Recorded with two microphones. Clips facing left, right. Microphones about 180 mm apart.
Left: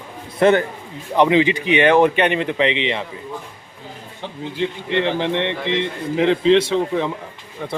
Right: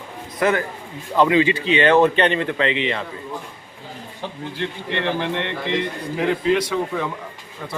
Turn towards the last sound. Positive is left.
turn(degrees=25)  # may be behind; listen again after turning